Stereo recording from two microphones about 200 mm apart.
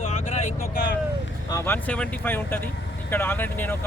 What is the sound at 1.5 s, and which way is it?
Speech, 10° left (ahead or behind).